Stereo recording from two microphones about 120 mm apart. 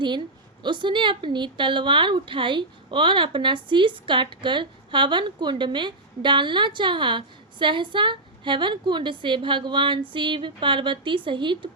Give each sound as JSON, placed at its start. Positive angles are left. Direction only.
{"t": 0.6, "sound": "a woman's voice", "side_deg": -40}